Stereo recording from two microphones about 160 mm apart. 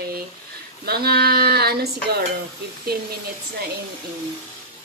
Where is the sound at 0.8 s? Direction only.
75° right (ahead or behind).